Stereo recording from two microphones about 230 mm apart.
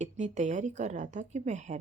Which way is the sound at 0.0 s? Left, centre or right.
Right.